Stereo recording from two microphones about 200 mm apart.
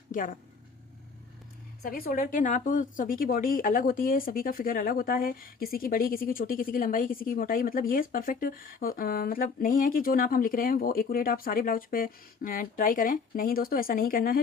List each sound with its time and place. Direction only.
0.1 s speech: 40° left (ahead or behind)
1.8 s speech: 45° left (ahead or behind)